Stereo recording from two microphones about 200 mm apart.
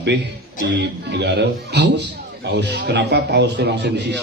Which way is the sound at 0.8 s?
60° right (ahead or behind).